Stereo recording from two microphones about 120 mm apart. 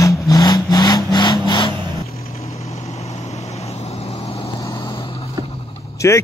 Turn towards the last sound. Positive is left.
turn(degrees=25)  # may be behind; listen again after turning